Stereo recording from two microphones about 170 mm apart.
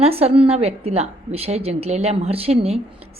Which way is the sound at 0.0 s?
35° right (ahead or behind).